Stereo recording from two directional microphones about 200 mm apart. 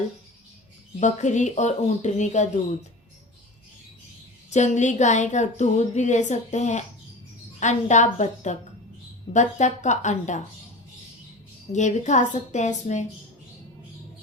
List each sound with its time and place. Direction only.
0.9 s a woman's voice: 35° left (ahead or behind)
4.4 s a woman's voice: 35° left (ahead or behind)
11.7 s a woman's voice: 35° left (ahead or behind)